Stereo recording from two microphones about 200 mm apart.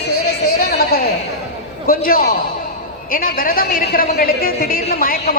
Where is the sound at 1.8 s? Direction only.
45° left (ahead or behind).